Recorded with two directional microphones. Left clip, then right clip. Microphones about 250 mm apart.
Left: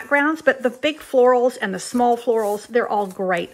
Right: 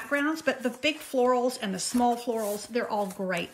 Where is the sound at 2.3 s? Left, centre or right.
Left.